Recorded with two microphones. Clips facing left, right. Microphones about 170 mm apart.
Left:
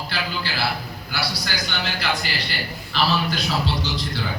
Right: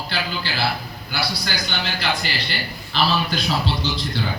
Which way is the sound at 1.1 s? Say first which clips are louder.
Right 2 dB; 30° right (ahead or behind).